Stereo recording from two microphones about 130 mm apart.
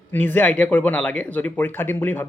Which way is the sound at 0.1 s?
15° left (ahead or behind).